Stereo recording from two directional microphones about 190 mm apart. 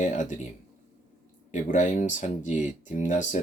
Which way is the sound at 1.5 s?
40° left (ahead or behind).